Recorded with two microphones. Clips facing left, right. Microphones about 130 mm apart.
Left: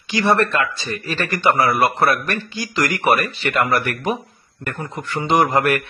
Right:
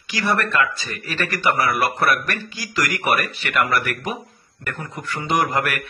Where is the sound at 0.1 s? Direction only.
25° left (ahead or behind).